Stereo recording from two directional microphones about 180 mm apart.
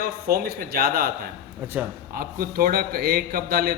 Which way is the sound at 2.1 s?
55° right (ahead or behind).